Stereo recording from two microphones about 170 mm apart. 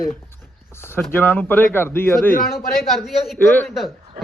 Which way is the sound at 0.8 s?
15° left (ahead or behind).